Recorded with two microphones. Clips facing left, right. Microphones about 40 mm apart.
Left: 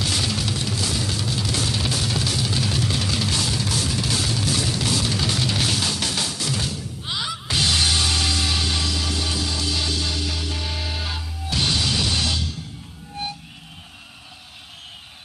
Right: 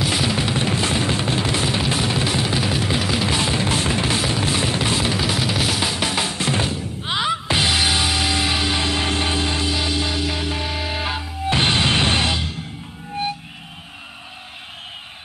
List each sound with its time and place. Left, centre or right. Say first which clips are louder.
0.0 s music: right 4 dB; centre
5.2 s music: right 2 dB; centre; by 12.5 s right